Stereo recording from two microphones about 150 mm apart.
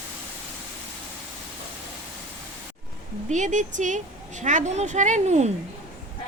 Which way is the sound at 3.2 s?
55° right (ahead or behind).